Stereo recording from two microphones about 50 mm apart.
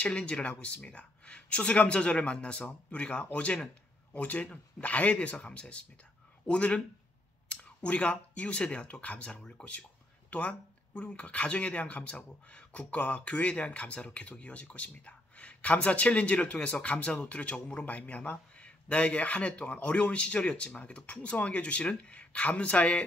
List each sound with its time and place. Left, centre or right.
0.0 s speech: left
7.8 s speech: left